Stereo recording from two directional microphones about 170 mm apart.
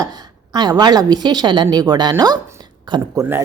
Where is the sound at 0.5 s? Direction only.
25° right (ahead or behind).